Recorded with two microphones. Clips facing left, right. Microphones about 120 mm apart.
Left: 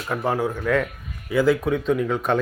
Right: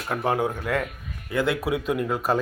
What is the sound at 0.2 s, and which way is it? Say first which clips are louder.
Speech: even; 20° right (ahead or behind).